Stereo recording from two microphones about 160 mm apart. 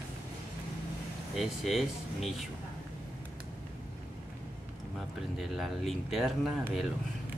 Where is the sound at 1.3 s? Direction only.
Centre (ahead or behind).